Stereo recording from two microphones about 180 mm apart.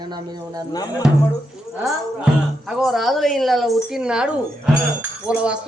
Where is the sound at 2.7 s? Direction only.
Centre (ahead or behind).